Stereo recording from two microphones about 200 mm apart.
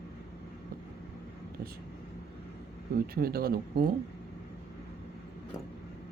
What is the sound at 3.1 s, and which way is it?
Speech, 50° right (ahead or behind).